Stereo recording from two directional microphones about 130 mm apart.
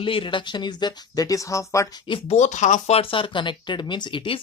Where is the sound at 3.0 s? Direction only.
40° left (ahead or behind).